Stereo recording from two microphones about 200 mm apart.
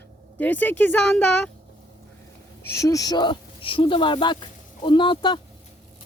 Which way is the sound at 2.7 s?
15° left (ahead or behind).